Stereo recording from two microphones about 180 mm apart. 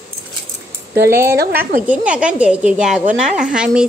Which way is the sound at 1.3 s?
60° right (ahead or behind).